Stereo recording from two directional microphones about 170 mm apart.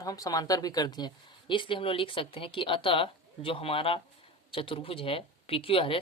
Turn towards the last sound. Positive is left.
turn(degrees=35)  # may be behind; listen again after turning